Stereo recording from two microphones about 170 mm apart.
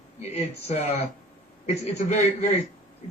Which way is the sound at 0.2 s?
40° left (ahead or behind).